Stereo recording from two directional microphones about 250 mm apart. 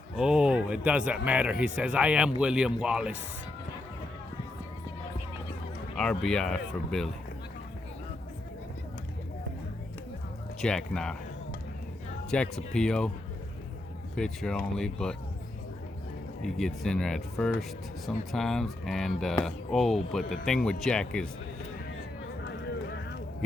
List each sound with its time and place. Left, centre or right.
0.2 s speech: centre
6.0 s speech: centre
10.6 s speech: centre
12.3 s speech: centre
14.2 s speech: centre
16.4 s speech: centre
22.4 s a sound: left